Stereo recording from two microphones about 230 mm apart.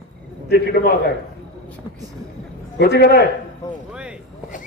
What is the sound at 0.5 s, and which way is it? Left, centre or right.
Speech, left.